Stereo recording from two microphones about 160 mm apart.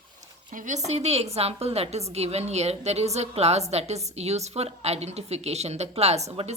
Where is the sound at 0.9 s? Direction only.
45° right (ahead or behind).